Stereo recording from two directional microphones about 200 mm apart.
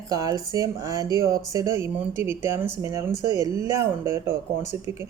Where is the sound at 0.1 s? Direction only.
15° right (ahead or behind).